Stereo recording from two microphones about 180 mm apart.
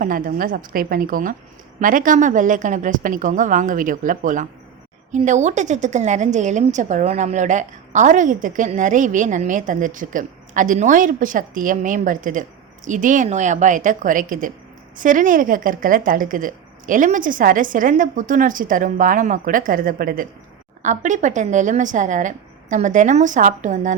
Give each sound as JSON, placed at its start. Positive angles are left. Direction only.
{"t": 0.0, "sound": "a woman's voice", "side_deg": -50}